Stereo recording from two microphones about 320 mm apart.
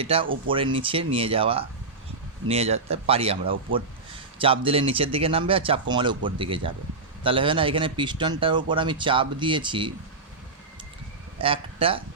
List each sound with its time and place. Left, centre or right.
0.0 s speech: centre
11.3 s speech: centre